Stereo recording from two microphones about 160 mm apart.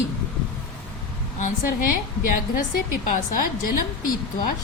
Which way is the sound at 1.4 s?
60° left (ahead or behind).